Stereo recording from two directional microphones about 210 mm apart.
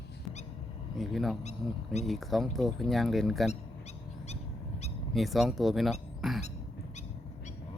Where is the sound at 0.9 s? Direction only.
Centre (ahead or behind).